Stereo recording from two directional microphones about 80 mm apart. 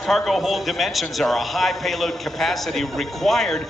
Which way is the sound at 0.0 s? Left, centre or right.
Centre.